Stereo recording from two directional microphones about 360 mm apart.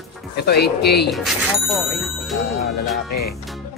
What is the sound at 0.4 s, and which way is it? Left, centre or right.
Speech, left.